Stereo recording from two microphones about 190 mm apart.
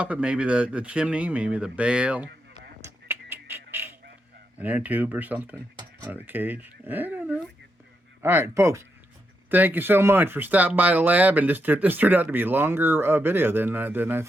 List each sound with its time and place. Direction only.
0.0 s speech: 5° right (ahead or behind)
2.8 s fowl: 10° right (ahead or behind)
4.6 s speech: 10° right (ahead or behind)